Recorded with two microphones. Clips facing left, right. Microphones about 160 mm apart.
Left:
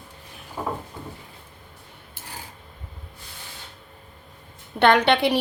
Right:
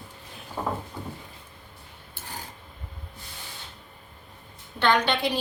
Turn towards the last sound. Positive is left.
turn(degrees=70)  # may be behind; listen again after turning